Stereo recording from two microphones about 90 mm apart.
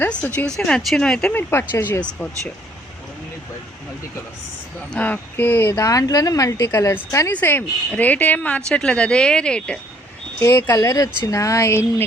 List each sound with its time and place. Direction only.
0.0 s a woman's voice: 10° left (ahead or behind)
1.4 s speech: 25° left (ahead or behind)
1.9 s a woman's voice: 15° left (ahead or behind)
4.9 s speech: 15° left (ahead or behind)
5.7 s speech: 40° left (ahead or behind)
6.7 s speech: 25° left (ahead or behind)
7.3 s a woman's voice: 20° left (ahead or behind)
10.4 s speech: 30° left (ahead or behind)
10.8 s speech: 45° left (ahead or behind)